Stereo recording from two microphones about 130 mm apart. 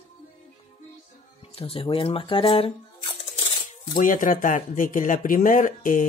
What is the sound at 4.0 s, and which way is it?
Speech, 90° left.